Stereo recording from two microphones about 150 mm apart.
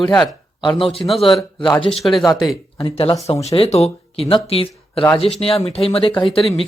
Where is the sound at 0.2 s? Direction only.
30° left (ahead or behind).